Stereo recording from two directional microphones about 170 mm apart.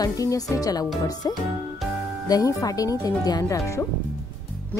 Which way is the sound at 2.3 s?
20° left (ahead or behind).